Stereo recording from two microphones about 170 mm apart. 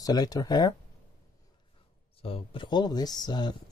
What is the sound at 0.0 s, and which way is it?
Speech, 25° left (ahead or behind).